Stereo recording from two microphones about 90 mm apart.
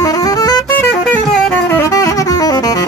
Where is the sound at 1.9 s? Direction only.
40° left (ahead or behind).